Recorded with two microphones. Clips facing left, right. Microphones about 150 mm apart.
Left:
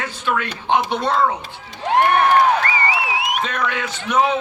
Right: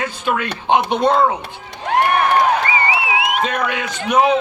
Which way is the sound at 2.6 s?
20° right (ahead or behind).